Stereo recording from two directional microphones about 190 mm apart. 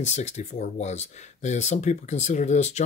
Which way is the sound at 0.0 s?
40° left (ahead or behind).